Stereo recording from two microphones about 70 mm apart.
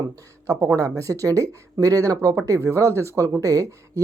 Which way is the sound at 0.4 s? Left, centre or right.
Right.